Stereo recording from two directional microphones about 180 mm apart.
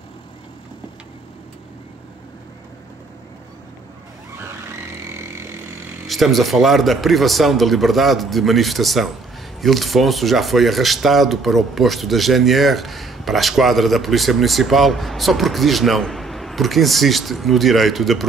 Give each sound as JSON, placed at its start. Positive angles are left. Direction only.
{"t": 5.1, "sound": "vehicle", "side_deg": -15}
{"t": 6.0, "sound": "speech", "side_deg": 0}